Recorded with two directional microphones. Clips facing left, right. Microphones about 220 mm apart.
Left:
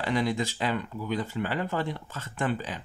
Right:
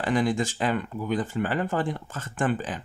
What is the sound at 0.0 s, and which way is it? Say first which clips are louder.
Speech: right 3 dB; 45° right (ahead or behind).